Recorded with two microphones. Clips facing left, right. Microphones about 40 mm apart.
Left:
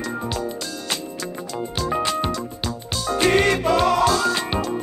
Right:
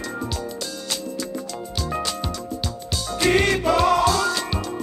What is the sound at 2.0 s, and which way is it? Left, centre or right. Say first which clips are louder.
Music: left 5 dB; left.